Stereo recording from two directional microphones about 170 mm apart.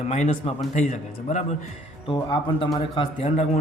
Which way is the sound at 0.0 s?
45° left (ahead or behind).